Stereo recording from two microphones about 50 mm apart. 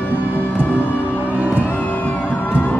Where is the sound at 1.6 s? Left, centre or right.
Left.